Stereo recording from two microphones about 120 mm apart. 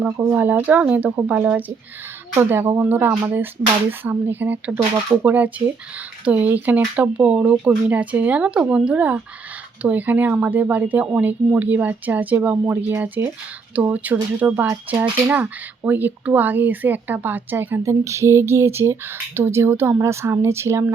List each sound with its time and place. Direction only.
0.0 s speech: 15° right (ahead or behind)